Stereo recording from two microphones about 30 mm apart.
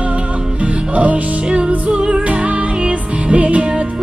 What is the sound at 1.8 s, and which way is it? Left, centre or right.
Music, right.